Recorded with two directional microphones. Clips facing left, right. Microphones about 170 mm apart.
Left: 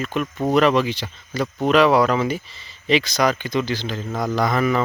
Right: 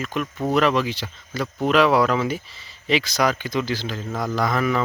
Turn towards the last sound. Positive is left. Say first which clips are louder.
# left 2 dB
turn(degrees=0)  # may be behind; listen again after turning